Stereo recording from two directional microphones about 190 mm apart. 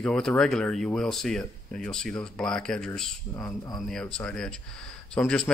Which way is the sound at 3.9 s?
5° left (ahead or behind).